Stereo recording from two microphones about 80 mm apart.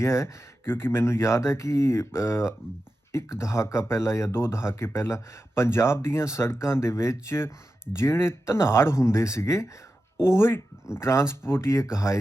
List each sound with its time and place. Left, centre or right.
0.0 s speech: left